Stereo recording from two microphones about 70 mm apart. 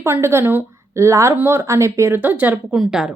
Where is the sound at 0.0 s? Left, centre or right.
Right.